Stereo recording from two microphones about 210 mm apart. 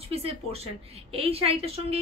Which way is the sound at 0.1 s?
30° right (ahead or behind).